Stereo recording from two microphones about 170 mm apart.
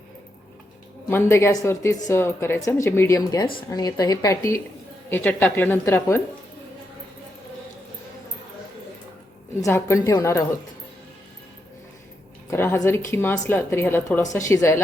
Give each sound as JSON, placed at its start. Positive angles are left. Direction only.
{"t": 1.1, "sound": "speech", "side_deg": 15}
{"t": 9.6, "sound": "speech", "side_deg": 15}
{"t": 12.5, "sound": "speech", "side_deg": 15}